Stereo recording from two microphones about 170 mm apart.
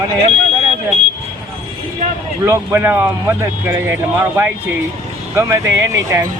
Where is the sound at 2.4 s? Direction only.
15° right (ahead or behind).